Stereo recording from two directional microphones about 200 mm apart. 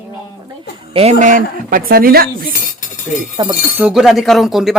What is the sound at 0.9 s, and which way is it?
Speech, 35° right (ahead or behind).